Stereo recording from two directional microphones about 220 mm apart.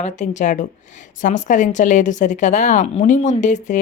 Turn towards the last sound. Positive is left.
turn(degrees=35)  # may be behind; listen again after turning